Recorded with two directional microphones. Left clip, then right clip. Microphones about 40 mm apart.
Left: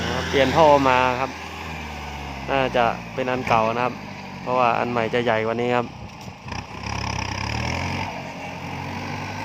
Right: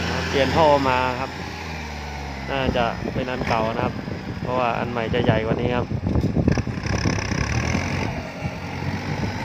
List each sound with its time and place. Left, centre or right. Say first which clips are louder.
0.0 s speech: left 1 dB; left
2.5 s speech: left 3 dB; left
6.5 s vehicle: right 4 dB; right